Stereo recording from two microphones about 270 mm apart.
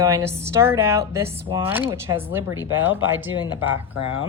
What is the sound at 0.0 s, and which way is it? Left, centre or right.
A woman's voice, centre.